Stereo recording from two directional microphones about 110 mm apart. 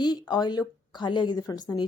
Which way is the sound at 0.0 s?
40° left (ahead or behind).